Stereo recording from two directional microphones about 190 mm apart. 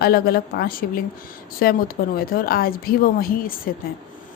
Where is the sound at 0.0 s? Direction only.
55° left (ahead or behind).